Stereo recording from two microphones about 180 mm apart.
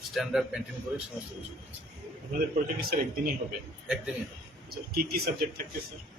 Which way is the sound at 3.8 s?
5° right (ahead or behind).